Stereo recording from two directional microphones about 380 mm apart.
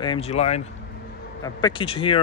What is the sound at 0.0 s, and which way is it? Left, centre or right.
Speech, centre.